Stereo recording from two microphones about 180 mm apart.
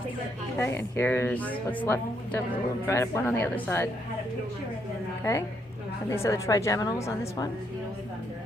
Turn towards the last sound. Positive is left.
turn(degrees=15)  # may be behind; listen again after turning